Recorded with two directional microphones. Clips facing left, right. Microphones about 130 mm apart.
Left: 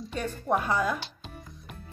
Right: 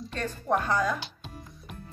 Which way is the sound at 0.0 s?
5° left (ahead or behind).